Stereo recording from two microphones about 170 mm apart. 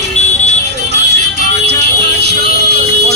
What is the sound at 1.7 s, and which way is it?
Vehicle, 75° right (ahead or behind).